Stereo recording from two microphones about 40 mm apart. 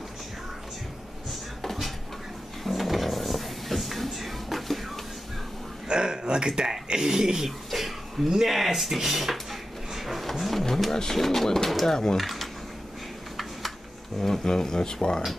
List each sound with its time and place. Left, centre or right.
1.6 s a sound: centre
2.6 s music: centre
5.9 s speech: right
7.4 s throat clearing: centre
8.3 s drawer open or close: centre
10.9 s speech: centre
12.2 s speech: centre
14.2 s speech: centre